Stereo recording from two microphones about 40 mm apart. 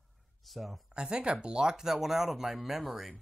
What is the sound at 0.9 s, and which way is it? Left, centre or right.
Speech, right.